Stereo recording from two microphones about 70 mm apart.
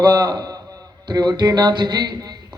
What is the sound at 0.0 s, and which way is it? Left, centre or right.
A man's voice, right.